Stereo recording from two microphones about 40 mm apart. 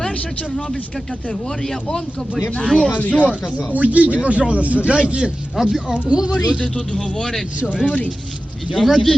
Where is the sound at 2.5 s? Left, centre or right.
Left.